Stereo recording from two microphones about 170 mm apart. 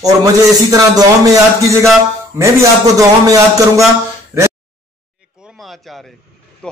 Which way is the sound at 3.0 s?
20° right (ahead or behind).